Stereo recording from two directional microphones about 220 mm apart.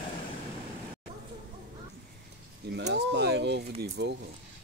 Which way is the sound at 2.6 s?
50° right (ahead or behind).